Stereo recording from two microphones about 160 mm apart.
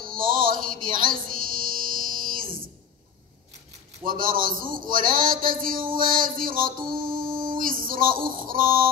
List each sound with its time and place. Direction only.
0.0 s music: 60° right (ahead or behind)
4.0 s a man's voice: 60° right (ahead or behind)
5.9 s a sound: 60° right (ahead or behind)